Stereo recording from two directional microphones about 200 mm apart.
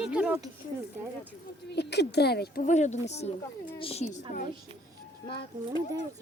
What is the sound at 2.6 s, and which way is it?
Speech, 35° left (ahead or behind).